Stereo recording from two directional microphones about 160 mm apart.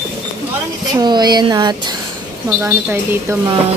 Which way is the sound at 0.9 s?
25° right (ahead or behind).